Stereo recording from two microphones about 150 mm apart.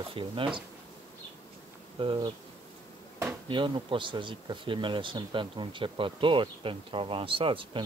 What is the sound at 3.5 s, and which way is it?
Speech, 35° right (ahead or behind).